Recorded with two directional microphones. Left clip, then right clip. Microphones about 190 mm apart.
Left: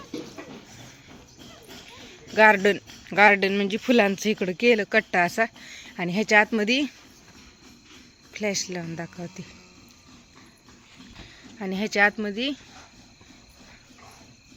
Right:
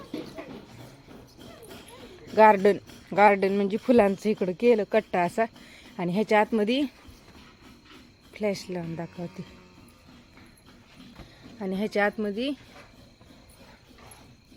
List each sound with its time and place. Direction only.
0.1 s a sound: 45° right (ahead or behind)
1.9 s a man's voice: 10° right (ahead or behind)
8.3 s a man's voice: centre (ahead or behind)
11.6 s a man's voice: centre (ahead or behind)